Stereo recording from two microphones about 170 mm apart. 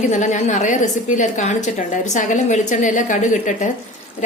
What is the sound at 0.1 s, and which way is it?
A woman's voice, 45° left (ahead or behind).